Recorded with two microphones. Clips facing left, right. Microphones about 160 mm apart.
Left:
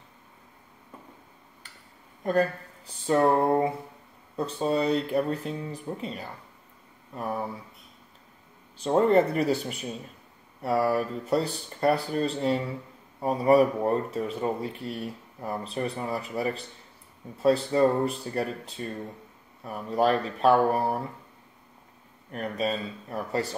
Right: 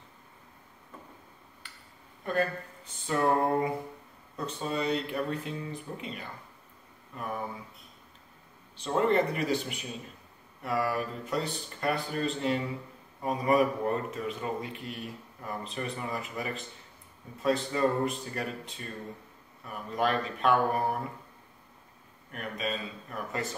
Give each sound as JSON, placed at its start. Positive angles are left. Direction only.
{"t": 2.2, "sound": "speech", "side_deg": 35}
{"t": 8.7, "sound": "speech", "side_deg": 40}
{"t": 17.7, "sound": "speech", "side_deg": 35}
{"t": 22.3, "sound": "speech", "side_deg": 35}